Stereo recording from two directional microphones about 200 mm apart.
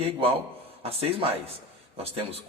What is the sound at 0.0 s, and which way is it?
Speech, 25° right (ahead or behind).